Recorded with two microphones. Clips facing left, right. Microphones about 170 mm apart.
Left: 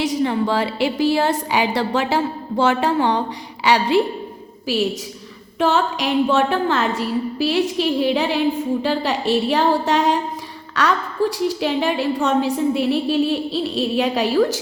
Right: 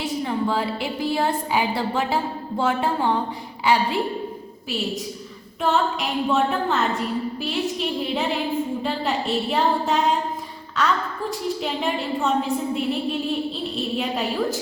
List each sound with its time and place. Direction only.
0.0 s a woman's voice: 85° left
5.5 s a woman's voice: 85° left